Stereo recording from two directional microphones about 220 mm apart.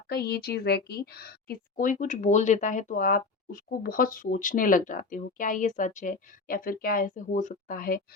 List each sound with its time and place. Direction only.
0.1 s speech: 45° left (ahead or behind)